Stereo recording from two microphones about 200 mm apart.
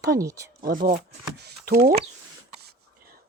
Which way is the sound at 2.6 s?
50° right (ahead or behind).